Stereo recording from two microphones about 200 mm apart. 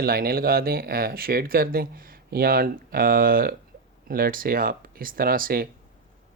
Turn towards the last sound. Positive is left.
turn(degrees=-45)  # may be behind; listen again after turning